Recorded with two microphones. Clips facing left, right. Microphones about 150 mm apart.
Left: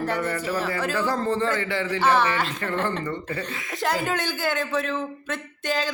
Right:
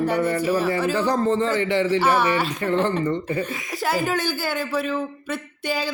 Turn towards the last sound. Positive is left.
turn(degrees=-10)  # may be behind; listen again after turning